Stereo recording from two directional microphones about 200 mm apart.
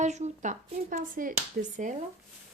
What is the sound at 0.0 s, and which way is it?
A woman's voice, 35° right (ahead or behind).